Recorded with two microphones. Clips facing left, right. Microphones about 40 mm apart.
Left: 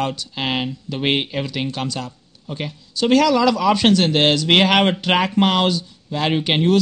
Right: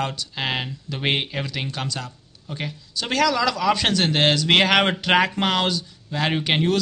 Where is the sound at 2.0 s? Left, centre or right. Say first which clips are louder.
Left 4 dB; centre.